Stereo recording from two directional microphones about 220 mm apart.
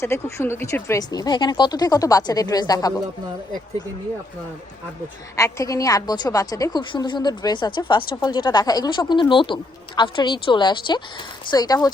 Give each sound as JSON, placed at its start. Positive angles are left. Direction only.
{"t": 0.0, "sound": "speech", "side_deg": 10}
{"t": 5.4, "sound": "a woman's voice", "side_deg": 15}